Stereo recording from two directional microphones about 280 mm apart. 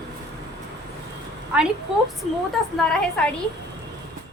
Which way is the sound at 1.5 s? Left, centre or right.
Centre.